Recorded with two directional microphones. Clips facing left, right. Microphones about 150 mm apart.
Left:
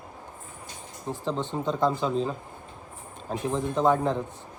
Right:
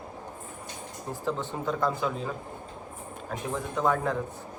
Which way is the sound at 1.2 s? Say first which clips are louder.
Left 2 dB; 20° left (ahead or behind).